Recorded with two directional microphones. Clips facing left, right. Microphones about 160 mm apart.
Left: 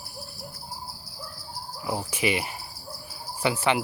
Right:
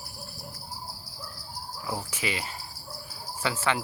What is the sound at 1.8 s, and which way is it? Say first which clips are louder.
Speech: left 6 dB; 15° left (ahead or behind).